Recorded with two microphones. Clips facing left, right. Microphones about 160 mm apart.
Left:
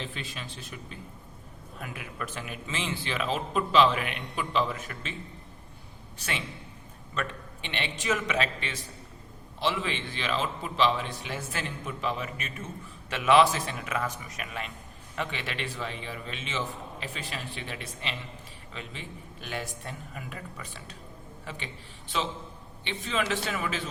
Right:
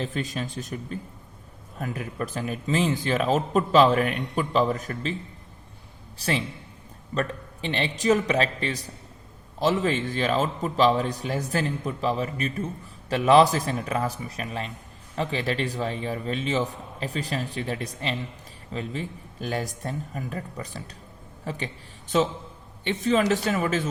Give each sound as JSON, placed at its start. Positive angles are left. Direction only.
{"t": 0.0, "sound": "speech", "side_deg": -45}
{"t": 6.1, "sound": "speech", "side_deg": -35}